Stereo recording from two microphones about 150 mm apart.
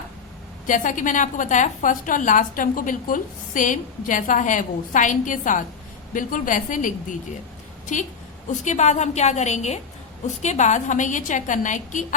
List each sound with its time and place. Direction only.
0.7 s a woman's voice: 60° left (ahead or behind)